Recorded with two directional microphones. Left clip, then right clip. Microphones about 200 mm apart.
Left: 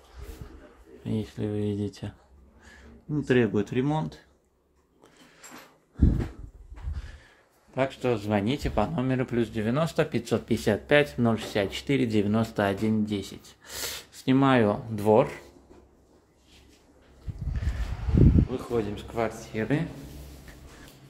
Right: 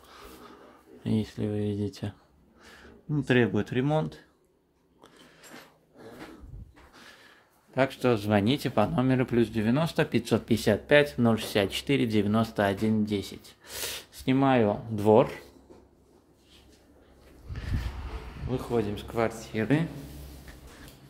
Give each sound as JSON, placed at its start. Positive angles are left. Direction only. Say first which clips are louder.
{"t": 1.0, "sound": "speech", "louder": "right 1 dB", "side_deg": -15}
{"t": 2.6, "sound": "speech", "louder": "right 1 dB", "side_deg": -30}
{"t": 7.7, "sound": "speech", "louder": "right 1 dB", "side_deg": -25}
{"t": 15.0, "sound": "speech", "louder": "right 1 dB", "side_deg": -10}
{"t": 18.5, "sound": "speech", "louder": "even", "side_deg": -20}